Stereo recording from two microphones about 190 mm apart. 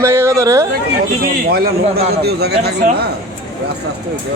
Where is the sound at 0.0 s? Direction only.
15° right (ahead or behind).